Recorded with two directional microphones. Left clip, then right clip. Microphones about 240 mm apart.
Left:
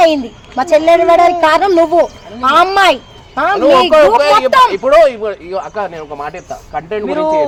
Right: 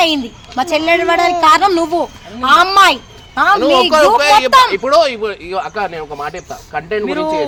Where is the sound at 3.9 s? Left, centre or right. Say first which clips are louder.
Left 2 dB; centre.